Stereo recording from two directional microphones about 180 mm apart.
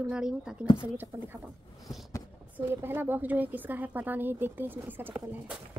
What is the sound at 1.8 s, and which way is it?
Vehicle, centre (ahead or behind).